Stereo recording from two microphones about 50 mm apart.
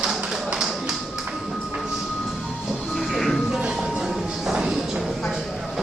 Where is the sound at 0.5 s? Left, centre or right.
Centre.